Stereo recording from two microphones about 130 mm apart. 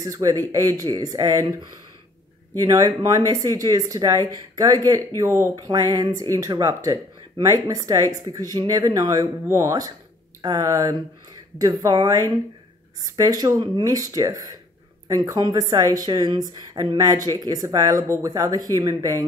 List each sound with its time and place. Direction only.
0.0 s speech: 30° right (ahead or behind)